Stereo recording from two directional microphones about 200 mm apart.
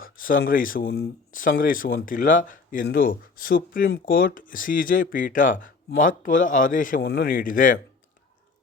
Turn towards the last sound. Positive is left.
turn(degrees=40)  # may be behind; listen again after turning